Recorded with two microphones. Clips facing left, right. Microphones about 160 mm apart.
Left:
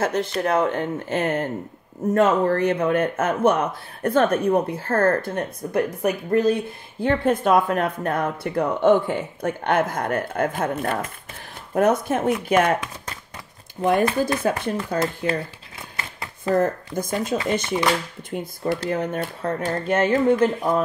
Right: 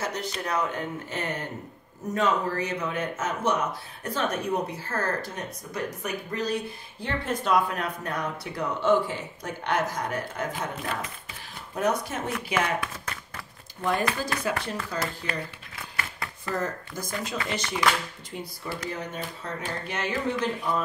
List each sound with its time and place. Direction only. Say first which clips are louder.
0.0 s a man's voice: left 9 dB; 55° left (ahead or behind)
14.4 s speech: left 3 dB; 45° left (ahead or behind)
14.8 s speech: left 8 dB; 25° left (ahead or behind)
16.0 s a sound: left 2 dB; 25° left (ahead or behind)
16.5 s speech: left 10 dB; 55° left (ahead or behind)
17.4 s speech: left 6 dB; 25° left (ahead or behind)
18.3 s speech: left 11 dB; 50° left (ahead or behind)